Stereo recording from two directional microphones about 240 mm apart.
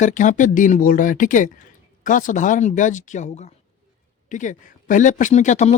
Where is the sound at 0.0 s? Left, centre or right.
Left.